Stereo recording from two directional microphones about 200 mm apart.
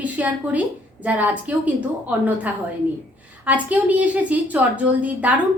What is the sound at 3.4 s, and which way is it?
A woman's voice, 5° right (ahead or behind).